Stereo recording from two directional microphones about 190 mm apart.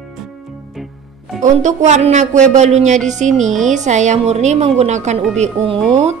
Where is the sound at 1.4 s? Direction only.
40° right (ahead or behind).